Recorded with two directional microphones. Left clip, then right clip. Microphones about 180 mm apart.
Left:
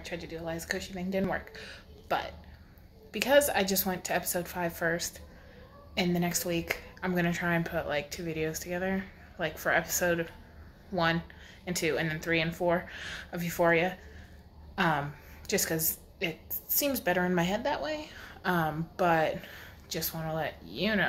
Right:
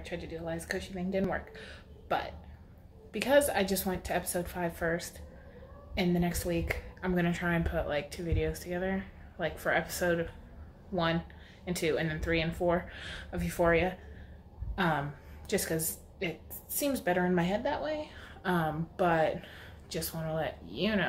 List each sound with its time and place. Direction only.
0.0 s speech: 5° left (ahead or behind)
11.6 s a woman's voice: 10° left (ahead or behind)